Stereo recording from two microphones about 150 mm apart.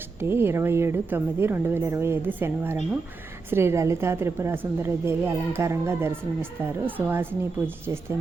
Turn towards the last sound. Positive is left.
turn(degrees=-15)  # may be behind; listen again after turning